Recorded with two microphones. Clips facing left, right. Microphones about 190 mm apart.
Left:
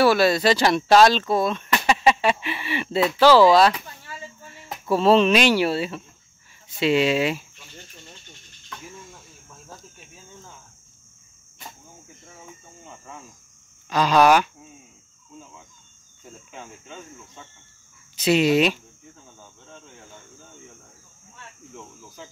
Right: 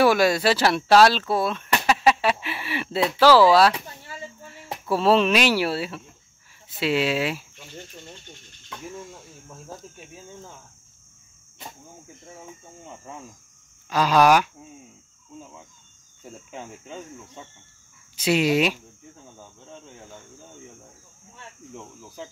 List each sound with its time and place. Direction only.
0.0 s speech: 15° right (ahead or behind)
3.7 s speech: 25° right (ahead or behind)
4.6 s speech: 5° right (ahead or behind)
13.8 s speech: 10° right (ahead or behind)
16.5 s speech: 30° right (ahead or behind)
18.1 s speech: 10° right (ahead or behind)